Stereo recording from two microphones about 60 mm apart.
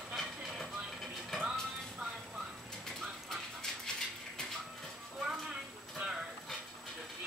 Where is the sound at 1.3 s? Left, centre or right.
Centre.